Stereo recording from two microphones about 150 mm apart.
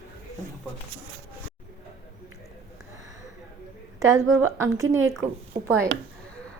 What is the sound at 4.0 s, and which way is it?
A woman's voice, 20° right (ahead or behind).